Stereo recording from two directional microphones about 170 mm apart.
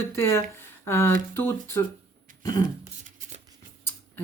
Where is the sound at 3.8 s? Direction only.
15° left (ahead or behind).